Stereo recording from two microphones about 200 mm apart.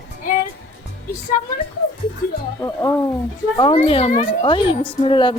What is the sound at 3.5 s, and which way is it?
Speech, 25° left (ahead or behind).